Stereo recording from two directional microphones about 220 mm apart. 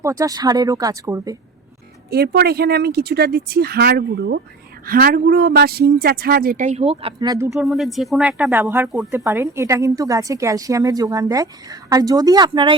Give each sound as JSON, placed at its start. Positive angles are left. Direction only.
{"t": 0.0, "sound": "speech", "side_deg": -15}
{"t": 2.0, "sound": "speech", "side_deg": -45}
{"t": 7.6, "sound": "speech", "side_deg": 0}